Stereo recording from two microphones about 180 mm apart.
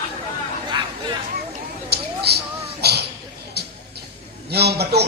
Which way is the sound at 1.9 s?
65° right (ahead or behind).